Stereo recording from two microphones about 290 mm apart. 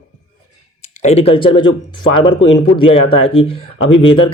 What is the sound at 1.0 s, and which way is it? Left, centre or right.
Speech, left.